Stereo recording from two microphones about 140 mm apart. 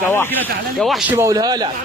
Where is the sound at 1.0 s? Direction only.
20° right (ahead or behind).